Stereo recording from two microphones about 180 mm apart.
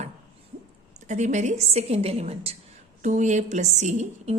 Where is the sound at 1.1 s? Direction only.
40° right (ahead or behind).